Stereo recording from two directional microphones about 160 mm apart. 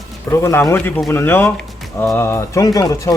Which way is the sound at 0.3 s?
15° left (ahead or behind).